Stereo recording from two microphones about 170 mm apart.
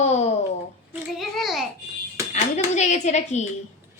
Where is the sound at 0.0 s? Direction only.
40° left (ahead or behind).